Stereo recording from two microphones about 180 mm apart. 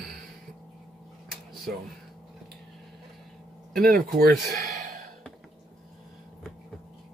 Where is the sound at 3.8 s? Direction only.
55° right (ahead or behind).